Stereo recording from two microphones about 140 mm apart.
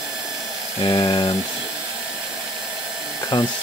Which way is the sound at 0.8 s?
30° left (ahead or behind).